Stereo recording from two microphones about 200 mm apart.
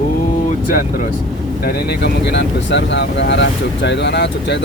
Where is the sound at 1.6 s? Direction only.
55° left (ahead or behind).